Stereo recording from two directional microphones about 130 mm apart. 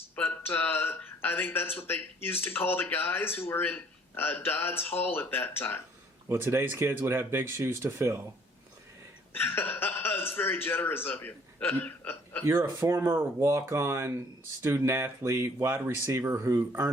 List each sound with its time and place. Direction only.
0.2 s speech: 15° left (ahead or behind)
6.2 s speech: 20° right (ahead or behind)
9.3 s speech: 15° left (ahead or behind)
12.5 s speech: 20° right (ahead or behind)